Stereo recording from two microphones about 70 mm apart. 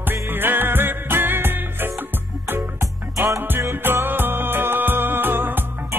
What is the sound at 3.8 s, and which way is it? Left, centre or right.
Music, right.